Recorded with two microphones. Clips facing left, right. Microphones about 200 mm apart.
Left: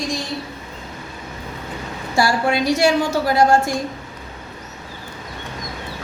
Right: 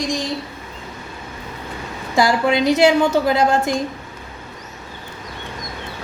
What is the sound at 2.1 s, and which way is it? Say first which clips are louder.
A woman's voice: right 2 dB; 20° right (ahead or behind).